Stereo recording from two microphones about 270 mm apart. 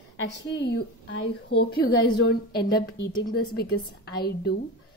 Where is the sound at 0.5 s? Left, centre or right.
Left.